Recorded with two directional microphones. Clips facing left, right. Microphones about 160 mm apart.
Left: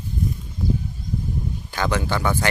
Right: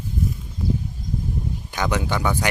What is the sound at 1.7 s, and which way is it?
Speech, 15° right (ahead or behind).